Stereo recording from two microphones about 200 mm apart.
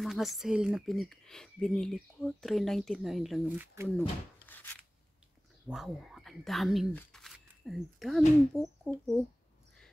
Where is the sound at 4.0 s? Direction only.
10° left (ahead or behind).